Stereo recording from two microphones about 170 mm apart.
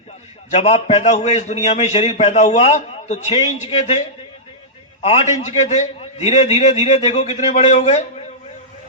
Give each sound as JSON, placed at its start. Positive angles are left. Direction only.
{"t": 0.5, "sound": "a man's voice", "side_deg": 40}
{"t": 5.0, "sound": "a man's voice", "side_deg": 40}